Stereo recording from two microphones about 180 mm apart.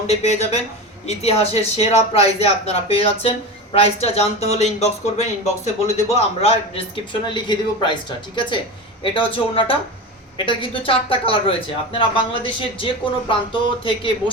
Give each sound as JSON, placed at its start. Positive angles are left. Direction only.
{"t": 0.1, "sound": "speech", "side_deg": 35}